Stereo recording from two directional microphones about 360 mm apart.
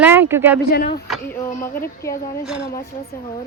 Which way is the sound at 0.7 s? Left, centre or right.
Left.